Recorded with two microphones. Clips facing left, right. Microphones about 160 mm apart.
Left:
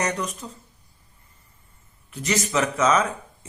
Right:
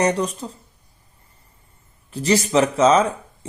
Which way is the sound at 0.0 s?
30° right (ahead or behind).